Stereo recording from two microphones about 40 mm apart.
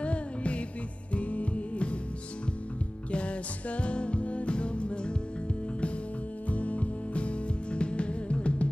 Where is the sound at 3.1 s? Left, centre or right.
Left.